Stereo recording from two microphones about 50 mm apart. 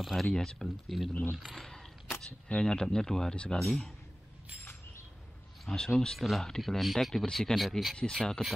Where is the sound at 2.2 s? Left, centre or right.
Centre.